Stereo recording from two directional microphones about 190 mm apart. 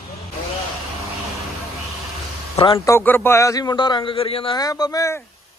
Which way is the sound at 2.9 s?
10° left (ahead or behind).